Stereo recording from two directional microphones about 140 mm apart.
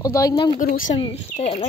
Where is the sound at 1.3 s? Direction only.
45° left (ahead or behind).